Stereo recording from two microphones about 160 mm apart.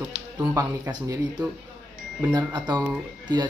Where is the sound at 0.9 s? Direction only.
25° right (ahead or behind).